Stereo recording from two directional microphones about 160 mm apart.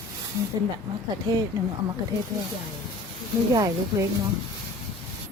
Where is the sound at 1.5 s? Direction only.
15° right (ahead or behind).